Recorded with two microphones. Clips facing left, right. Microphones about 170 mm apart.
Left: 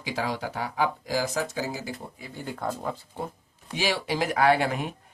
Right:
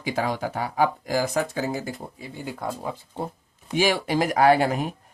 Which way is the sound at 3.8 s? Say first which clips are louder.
Right 5 dB; 50° right (ahead or behind).